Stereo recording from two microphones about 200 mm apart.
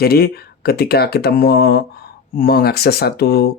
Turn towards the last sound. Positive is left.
turn(degrees=50)  # may be behind; listen again after turning